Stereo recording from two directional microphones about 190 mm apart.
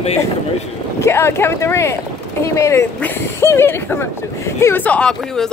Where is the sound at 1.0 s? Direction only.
15° left (ahead or behind).